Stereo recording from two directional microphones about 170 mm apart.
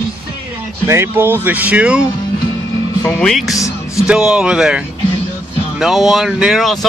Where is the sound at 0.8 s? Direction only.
15° right (ahead or behind).